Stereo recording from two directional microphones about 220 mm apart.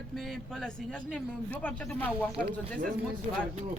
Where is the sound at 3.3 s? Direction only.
30° right (ahead or behind).